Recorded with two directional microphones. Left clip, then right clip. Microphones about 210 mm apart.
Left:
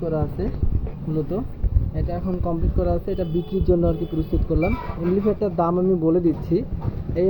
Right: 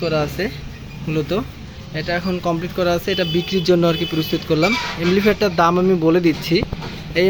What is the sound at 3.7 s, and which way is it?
Speech, 35° right (ahead or behind).